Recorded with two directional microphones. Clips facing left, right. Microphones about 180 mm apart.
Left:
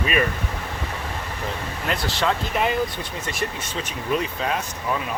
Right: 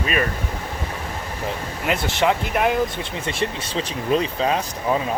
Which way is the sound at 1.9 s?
20° right (ahead or behind).